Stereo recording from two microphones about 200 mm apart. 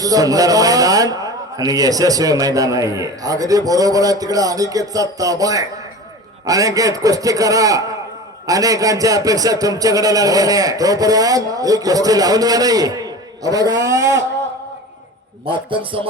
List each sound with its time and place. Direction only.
0.0 s a man's voice: 20° right (ahead or behind)
15.4 s a man's voice: 25° right (ahead or behind)